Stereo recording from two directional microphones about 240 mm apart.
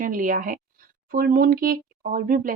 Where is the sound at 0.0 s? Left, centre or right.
Right.